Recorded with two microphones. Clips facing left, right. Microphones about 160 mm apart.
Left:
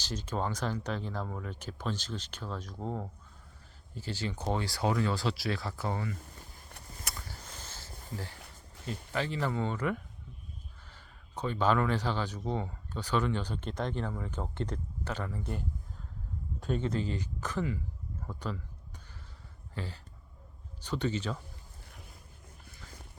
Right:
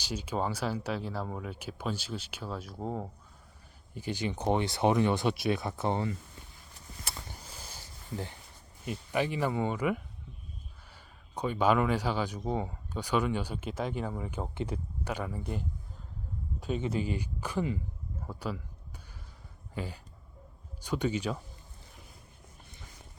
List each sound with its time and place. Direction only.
0.0 s speech: 10° right (ahead or behind)
7.0 s vehicle: 25° right (ahead or behind)
7.4 s a sound: 10° right (ahead or behind)
8.9 s speech: 15° right (ahead or behind)
19.7 s speech: 15° right (ahead or behind)